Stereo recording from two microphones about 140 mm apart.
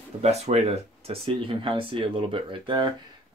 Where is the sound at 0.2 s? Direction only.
50° right (ahead or behind); by 2.9 s 35° right (ahead or behind).